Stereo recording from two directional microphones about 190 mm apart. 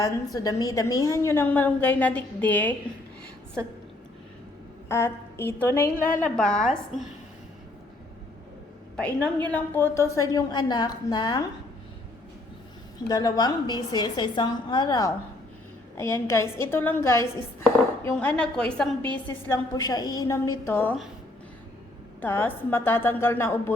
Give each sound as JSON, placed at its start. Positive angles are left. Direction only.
{"t": 0.0, "sound": "a woman's voice", "side_deg": 20}
{"t": 4.9, "sound": "a woman's voice", "side_deg": 15}
{"t": 9.0, "sound": "a woman's voice", "side_deg": 5}
{"t": 13.1, "sound": "a woman's voice", "side_deg": 20}
{"t": 22.2, "sound": "a woman's voice", "side_deg": 10}